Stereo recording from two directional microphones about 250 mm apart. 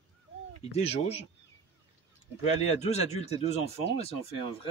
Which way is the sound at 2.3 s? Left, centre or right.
Left.